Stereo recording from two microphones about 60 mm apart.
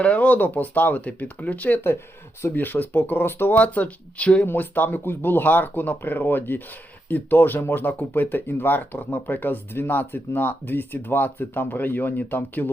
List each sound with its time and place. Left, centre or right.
0.0 s speech: left
3.6 s speech: left
4.4 s speech: left